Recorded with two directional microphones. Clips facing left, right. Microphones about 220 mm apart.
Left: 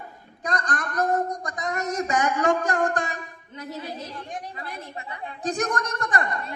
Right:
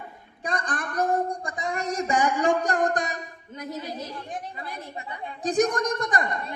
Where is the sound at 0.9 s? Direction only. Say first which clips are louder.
Even; 10° right (ahead or behind).